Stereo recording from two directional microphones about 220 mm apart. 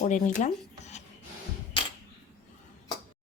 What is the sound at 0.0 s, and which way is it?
Speech, 35° left (ahead or behind).